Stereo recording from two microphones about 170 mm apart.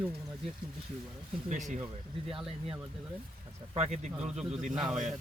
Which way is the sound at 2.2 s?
Centre (ahead or behind).